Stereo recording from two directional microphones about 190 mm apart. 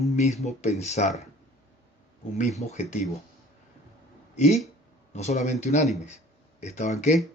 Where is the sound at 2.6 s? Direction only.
35° left (ahead or behind).